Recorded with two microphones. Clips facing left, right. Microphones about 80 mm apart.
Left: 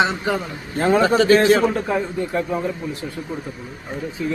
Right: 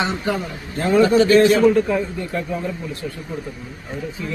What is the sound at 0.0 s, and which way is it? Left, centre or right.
Speech, left.